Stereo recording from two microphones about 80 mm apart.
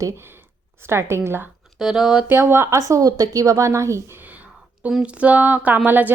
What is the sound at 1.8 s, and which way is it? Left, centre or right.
Speech, centre.